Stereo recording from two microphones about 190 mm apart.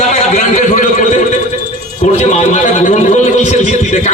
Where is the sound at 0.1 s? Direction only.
40° left (ahead or behind).